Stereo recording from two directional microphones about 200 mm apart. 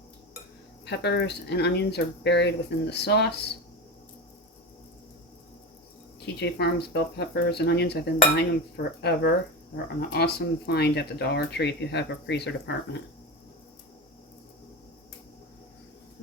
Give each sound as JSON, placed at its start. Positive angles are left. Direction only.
{"t": 0.9, "sound": "speech", "side_deg": 60}
{"t": 6.1, "sound": "speech", "side_deg": 55}